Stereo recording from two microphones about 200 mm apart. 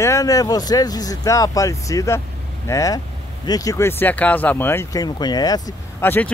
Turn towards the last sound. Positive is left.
turn(degrees=10)  # may be behind; listen again after turning